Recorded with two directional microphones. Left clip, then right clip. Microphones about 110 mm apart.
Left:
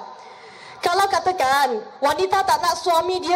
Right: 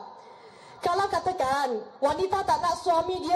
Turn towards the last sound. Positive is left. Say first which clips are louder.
# left 6 dB
turn(degrees=15)  # may be behind; listen again after turning